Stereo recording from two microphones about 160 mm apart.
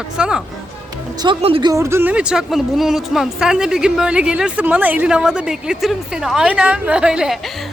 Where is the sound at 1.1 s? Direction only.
30° right (ahead or behind).